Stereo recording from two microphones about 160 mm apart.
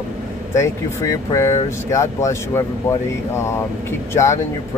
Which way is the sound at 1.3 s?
20° left (ahead or behind).